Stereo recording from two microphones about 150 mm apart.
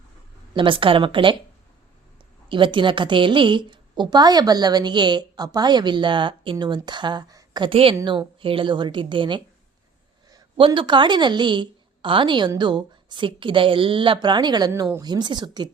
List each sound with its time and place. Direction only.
0.5 s a woman's voice: 35° right (ahead or behind)
2.5 s a woman's voice: 35° right (ahead or behind)